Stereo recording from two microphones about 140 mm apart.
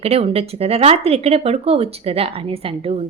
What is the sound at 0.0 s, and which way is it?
A woman's voice, 45° right (ahead or behind).